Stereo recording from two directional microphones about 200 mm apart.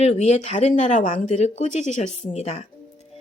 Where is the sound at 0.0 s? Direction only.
35° left (ahead or behind).